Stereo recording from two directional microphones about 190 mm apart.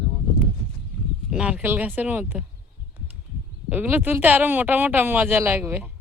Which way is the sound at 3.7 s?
10° right (ahead or behind).